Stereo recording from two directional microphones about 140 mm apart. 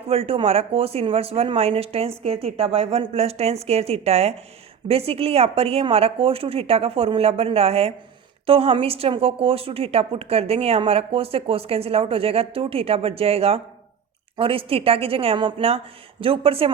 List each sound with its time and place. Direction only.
0.1 s a woman's voice: 45° right (ahead or behind)